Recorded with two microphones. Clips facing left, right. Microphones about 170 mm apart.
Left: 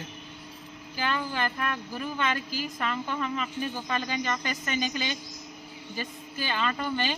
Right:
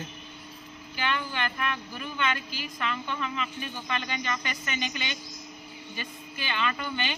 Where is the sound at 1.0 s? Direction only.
35° left (ahead or behind).